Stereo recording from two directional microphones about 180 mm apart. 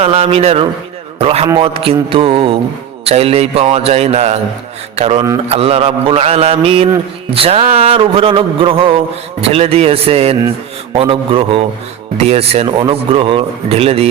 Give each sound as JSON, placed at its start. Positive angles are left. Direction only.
{"t": 0.0, "sound": "mantra", "side_deg": -35}